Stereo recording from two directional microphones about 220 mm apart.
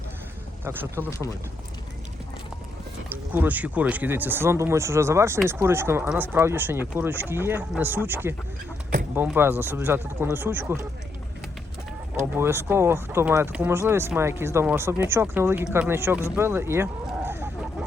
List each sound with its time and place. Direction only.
0.6 s speech: 10° right (ahead or behind)
3.3 s speech: 5° right (ahead or behind)
12.1 s speech: 10° right (ahead or behind)